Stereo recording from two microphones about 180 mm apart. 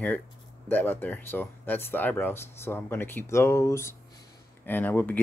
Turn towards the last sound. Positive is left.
turn(degrees=10)  # may be behind; listen again after turning